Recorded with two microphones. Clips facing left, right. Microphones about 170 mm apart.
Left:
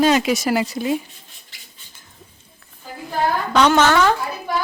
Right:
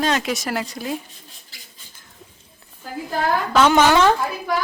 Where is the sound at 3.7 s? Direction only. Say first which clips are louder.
Even; 10° right (ahead or behind).